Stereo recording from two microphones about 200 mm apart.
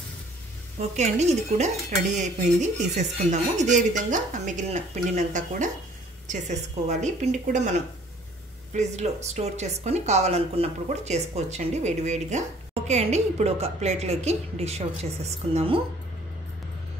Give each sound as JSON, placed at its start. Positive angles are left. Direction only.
{"t": 0.7, "sound": "speech", "side_deg": -35}